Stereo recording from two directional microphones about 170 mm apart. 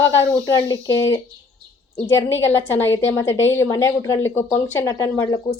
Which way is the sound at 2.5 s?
15° left (ahead or behind).